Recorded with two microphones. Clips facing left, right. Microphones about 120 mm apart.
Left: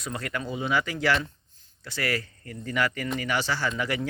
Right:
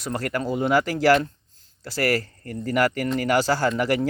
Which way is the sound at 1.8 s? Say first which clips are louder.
Right 7 dB; 35° right (ahead or behind).